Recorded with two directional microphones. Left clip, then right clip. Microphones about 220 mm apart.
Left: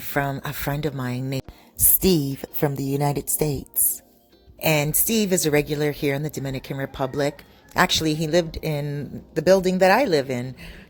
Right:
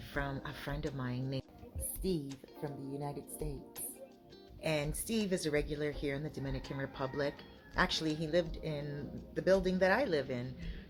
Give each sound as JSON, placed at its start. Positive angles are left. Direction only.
{"t": 0.0, "sound": "speech", "side_deg": 40}
{"t": 4.6, "sound": "speech", "side_deg": 45}